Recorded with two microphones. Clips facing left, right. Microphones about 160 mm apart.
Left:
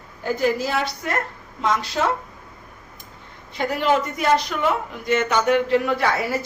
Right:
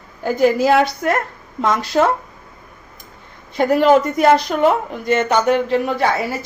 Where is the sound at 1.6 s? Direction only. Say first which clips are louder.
Right 6 dB; 55° right (ahead or behind).